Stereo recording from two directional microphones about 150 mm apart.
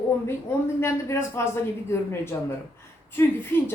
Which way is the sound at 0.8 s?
20° left (ahead or behind).